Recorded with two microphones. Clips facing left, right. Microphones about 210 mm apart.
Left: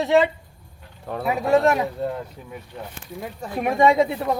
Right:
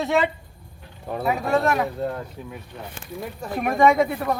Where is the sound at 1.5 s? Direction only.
20° left (ahead or behind).